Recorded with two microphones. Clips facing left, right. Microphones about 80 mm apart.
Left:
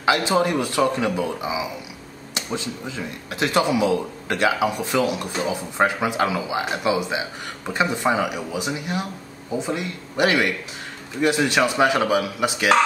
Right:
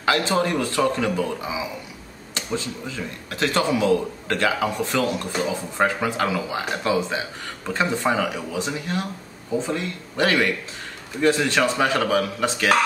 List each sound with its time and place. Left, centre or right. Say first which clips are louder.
0.0 s speech: left 2 dB; centre